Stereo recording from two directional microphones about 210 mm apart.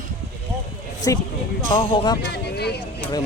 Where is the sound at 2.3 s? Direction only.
50° left (ahead or behind).